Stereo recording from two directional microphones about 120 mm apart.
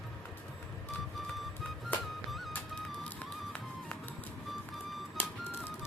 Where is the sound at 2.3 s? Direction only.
Centre (ahead or behind).